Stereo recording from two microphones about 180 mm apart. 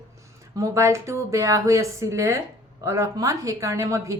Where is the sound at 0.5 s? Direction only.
15° right (ahead or behind).